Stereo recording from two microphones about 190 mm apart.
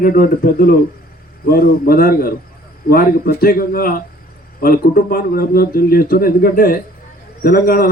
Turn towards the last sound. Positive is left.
turn(degrees=50)  # may be behind; listen again after turning